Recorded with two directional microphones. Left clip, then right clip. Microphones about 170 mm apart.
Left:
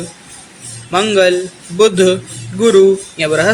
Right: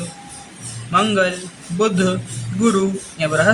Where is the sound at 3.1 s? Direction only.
25° left (ahead or behind).